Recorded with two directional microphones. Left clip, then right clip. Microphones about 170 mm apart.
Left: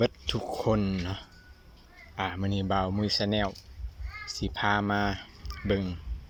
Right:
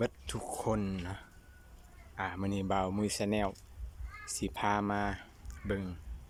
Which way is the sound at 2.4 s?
15° right (ahead or behind).